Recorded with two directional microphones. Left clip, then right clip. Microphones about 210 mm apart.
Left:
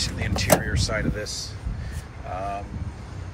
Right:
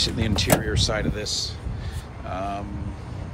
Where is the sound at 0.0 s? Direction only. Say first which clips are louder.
Right 4 dB; 15° right (ahead or behind).